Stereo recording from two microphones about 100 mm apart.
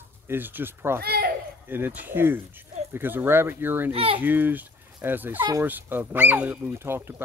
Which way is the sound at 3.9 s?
70° right (ahead or behind).